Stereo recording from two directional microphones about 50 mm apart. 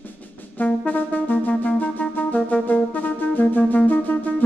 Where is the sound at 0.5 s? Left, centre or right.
Left.